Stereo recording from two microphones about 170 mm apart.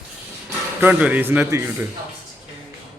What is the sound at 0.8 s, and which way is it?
A man's voice, 10° right (ahead or behind).